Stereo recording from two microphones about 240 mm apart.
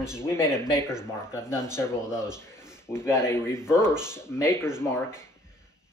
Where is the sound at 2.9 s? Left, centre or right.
Centre.